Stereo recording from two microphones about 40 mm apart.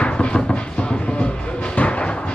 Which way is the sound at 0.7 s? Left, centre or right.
Left.